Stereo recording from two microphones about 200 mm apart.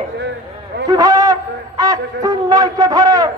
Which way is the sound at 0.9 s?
20° right (ahead or behind).